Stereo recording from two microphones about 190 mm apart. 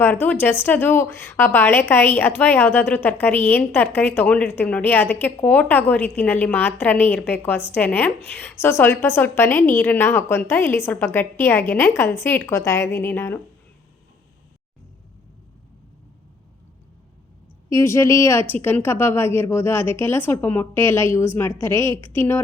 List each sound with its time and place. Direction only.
0.0 s a woman's voice: 10° left (ahead or behind)
17.7 s a woman's voice: 15° left (ahead or behind)